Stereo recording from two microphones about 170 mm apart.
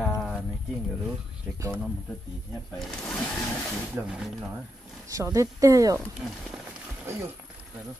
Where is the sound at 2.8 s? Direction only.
5° left (ahead or behind).